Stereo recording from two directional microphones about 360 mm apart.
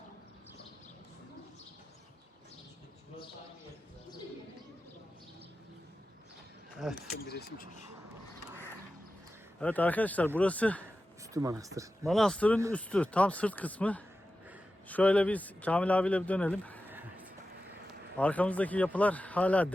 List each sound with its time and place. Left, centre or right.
6.7 s speech: centre
7.3 s speech: left
9.6 s a man's voice: centre
11.3 s a man's voice: centre